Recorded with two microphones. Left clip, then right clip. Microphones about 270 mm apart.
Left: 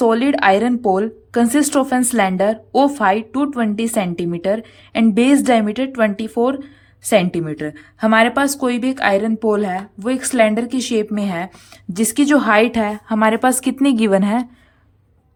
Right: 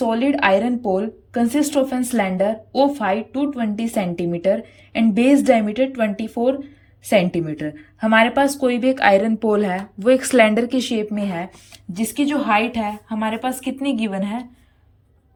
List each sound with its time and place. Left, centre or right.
0.0 s a woman's voice: centre